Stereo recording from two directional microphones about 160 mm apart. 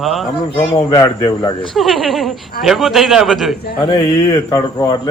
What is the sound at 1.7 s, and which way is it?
Speech, centre (ahead or behind).